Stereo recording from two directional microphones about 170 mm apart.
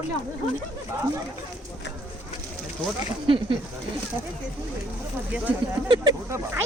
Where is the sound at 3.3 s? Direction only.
30° right (ahead or behind).